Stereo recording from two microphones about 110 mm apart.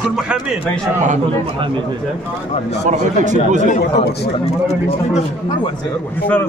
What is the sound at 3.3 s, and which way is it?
Speech, 90° right.